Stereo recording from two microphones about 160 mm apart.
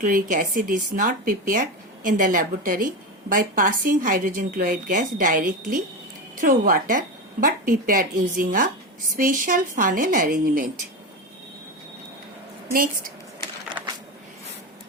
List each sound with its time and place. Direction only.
0.0 s a woman's voice: 55° right (ahead or behind)